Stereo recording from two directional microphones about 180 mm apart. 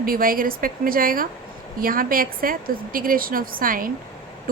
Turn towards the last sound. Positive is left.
turn(degrees=-50)  # may be behind; listen again after turning